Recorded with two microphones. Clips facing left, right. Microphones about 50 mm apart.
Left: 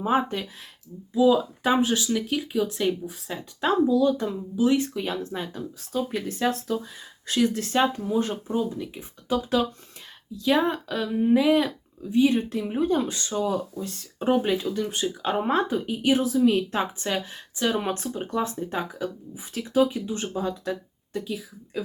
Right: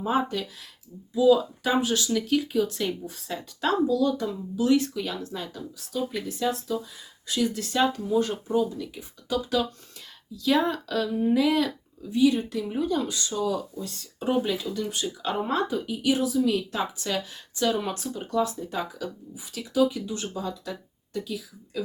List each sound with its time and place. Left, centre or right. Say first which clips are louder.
0.0 s speech: left 2 dB; left
2.0 s speech: right 1 dB; centre
17.5 s speech: even; centre
17.7 s speech: left 2 dB; left